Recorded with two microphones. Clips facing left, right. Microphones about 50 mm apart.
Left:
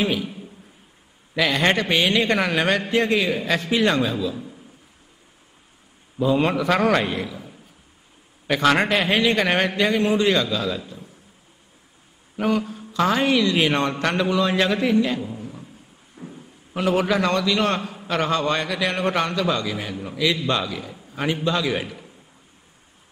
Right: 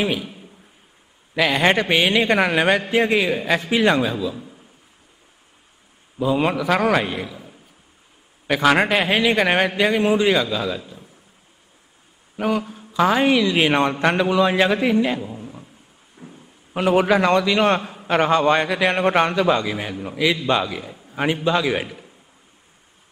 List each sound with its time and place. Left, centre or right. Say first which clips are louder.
0.0 s a man's voice: even; centre
1.3 s a man's voice: right 2 dB; centre
6.1 s a man's voice: even; centre
12.4 s a man's voice: even; centre
16.2 s a sound: left 3 dB; centre
16.7 s a man's voice: right 4 dB; right